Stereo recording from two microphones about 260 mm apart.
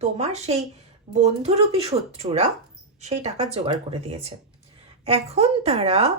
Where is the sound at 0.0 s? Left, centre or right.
Right.